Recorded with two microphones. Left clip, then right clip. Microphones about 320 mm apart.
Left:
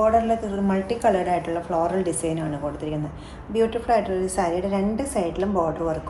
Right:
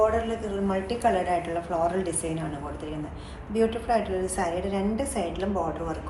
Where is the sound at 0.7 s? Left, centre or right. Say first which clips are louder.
Left 4 dB; left.